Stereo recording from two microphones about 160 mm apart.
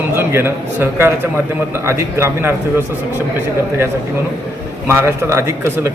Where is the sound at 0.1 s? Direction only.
15° right (ahead or behind).